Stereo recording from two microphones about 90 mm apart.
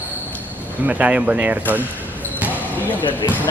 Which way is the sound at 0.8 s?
15° right (ahead or behind).